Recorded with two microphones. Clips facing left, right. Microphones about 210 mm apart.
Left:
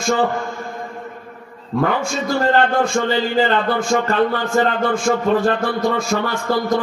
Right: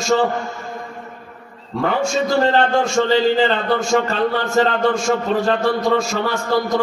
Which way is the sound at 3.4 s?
55° left (ahead or behind).